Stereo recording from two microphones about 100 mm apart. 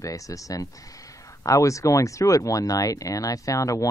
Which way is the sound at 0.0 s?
35° left (ahead or behind).